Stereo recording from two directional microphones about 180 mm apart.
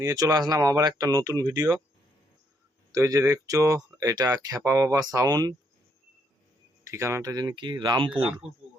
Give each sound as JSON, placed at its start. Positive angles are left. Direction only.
{"t": 0.0, "sound": "speech", "side_deg": -20}
{"t": 2.9, "sound": "speech", "side_deg": -15}
{"t": 6.8, "sound": "speech", "side_deg": -15}